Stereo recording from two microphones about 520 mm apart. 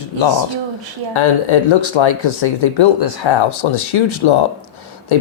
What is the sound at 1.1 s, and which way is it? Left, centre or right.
Speech, left.